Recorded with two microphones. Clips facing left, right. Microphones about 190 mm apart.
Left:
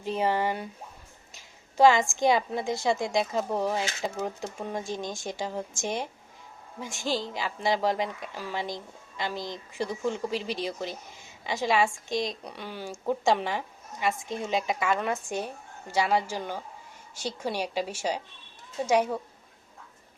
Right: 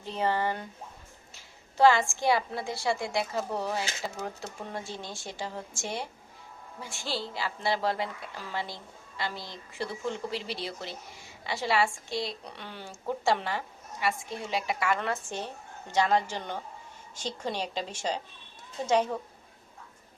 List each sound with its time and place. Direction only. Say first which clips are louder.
0.0 s a woman's voice: left 2 dB; 15° left (ahead or behind)